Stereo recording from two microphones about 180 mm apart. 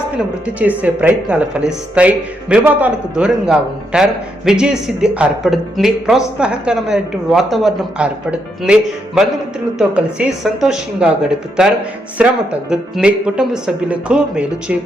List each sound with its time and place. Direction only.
0.4 s speech: 10° right (ahead or behind)